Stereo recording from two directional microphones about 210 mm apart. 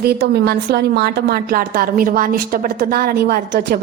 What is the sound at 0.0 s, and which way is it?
A woman's voice, 50° right (ahead or behind).